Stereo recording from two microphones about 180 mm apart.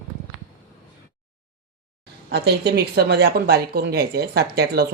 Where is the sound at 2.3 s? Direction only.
65° right (ahead or behind).